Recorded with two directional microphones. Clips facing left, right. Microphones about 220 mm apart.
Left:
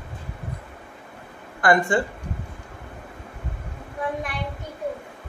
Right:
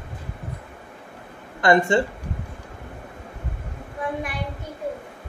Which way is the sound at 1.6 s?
25° right (ahead or behind).